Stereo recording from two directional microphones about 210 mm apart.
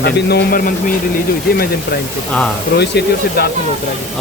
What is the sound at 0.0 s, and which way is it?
Speech, 55° left (ahead or behind).